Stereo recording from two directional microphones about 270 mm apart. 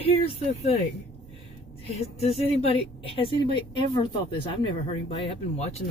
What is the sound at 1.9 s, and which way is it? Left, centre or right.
Speech, left.